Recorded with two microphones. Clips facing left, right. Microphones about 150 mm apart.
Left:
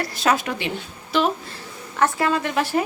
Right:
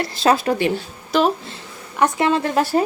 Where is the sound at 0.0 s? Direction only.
30° right (ahead or behind).